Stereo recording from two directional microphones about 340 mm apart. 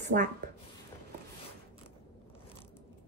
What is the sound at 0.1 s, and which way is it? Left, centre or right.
Speech, right.